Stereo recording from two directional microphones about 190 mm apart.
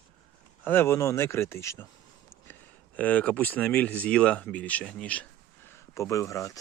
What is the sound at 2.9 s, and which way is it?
Speech, 10° left (ahead or behind).